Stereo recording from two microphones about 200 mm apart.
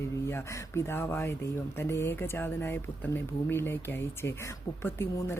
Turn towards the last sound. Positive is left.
turn(degrees=10)  # may be behind; listen again after turning